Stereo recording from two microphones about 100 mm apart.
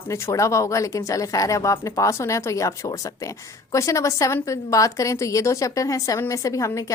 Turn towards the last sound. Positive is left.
turn(degrees=30)  # may be behind; listen again after turning